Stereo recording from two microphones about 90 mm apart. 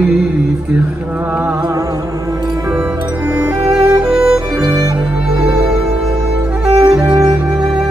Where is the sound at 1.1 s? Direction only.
20° right (ahead or behind).